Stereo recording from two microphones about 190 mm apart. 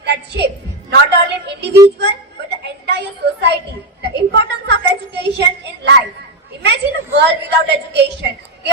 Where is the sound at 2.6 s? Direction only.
60° right (ahead or behind).